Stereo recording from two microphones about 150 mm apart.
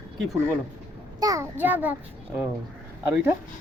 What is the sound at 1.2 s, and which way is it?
Speech, 20° right (ahead or behind).